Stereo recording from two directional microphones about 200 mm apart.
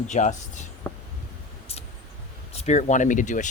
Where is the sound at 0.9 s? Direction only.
10° left (ahead or behind).